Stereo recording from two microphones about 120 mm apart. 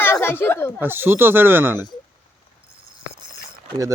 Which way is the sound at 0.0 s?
20° left (ahead or behind).